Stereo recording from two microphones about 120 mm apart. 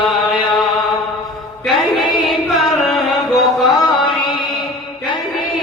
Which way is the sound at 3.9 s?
45° left (ahead or behind).